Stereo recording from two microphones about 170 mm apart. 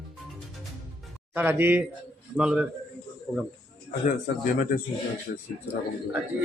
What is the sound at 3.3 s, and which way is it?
Speech, 15° left (ahead or behind).